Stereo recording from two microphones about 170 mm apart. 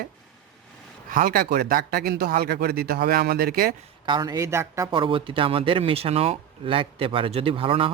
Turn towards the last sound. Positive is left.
turn(degrees=-30)  # may be behind; listen again after turning